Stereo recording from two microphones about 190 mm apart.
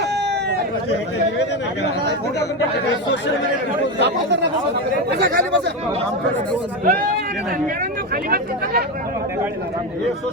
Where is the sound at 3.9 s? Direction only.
65° right (ahead or behind).